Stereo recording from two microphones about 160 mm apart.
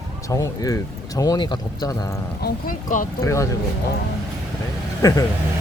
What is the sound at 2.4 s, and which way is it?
Speech, 60° left (ahead or behind).